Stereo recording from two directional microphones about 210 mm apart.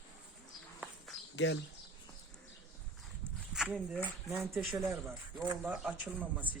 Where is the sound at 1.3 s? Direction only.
60° left (ahead or behind).